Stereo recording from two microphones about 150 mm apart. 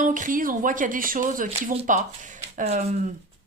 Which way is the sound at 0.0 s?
60° right (ahead or behind).